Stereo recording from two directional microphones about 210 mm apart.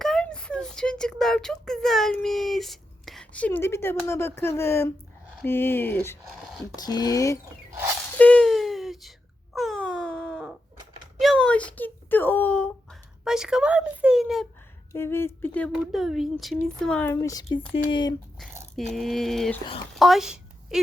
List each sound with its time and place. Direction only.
0.0 s speech: centre (ahead or behind)
8.2 s wail: 5° left (ahead or behind)
11.2 s a sound: 5° left (ahead or behind)
14.9 s speech: 10° left (ahead or behind)
18.8 s a woman's voice: centre (ahead or behind)